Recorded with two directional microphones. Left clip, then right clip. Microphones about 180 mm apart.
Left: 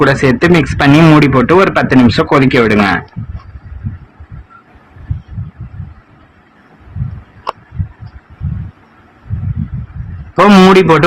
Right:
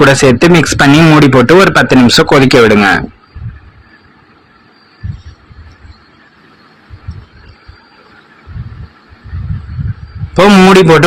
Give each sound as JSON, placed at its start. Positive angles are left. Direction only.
{"t": 0.0, "sound": "speech", "side_deg": -20}
{"t": 10.7, "sound": "speech", "side_deg": -25}